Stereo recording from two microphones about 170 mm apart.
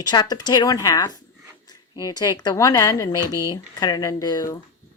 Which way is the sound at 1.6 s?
25° left (ahead or behind).